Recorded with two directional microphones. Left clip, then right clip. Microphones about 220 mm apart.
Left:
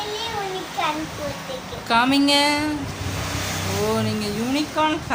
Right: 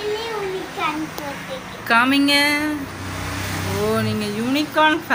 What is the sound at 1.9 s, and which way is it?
Speech, 5° left (ahead or behind).